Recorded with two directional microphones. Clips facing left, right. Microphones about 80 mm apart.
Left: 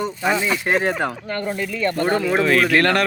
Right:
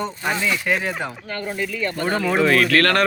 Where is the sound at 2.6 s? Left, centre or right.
Centre.